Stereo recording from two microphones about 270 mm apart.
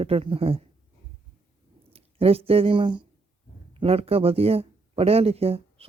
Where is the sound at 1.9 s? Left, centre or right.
Right.